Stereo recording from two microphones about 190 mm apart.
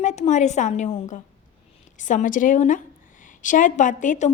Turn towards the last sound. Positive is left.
turn(degrees=40)  # may be behind; listen again after turning